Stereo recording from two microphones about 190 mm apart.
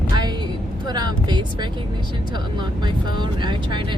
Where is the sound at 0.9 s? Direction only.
20° right (ahead or behind).